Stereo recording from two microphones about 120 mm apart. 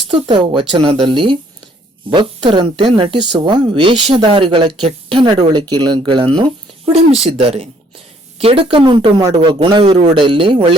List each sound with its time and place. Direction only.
0.1 s a man's voice: 45° right (ahead or behind)
6.9 s a man's voice: 55° right (ahead or behind)